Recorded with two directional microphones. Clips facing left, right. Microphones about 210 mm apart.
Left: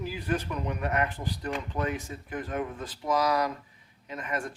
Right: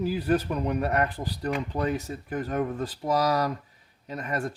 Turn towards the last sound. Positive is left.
turn(degrees=-35)  # may be behind; listen again after turning